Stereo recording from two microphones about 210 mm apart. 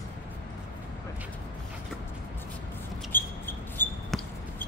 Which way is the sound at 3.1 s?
10° left (ahead or behind).